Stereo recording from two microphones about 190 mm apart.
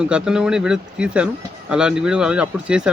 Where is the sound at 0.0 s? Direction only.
5° right (ahead or behind).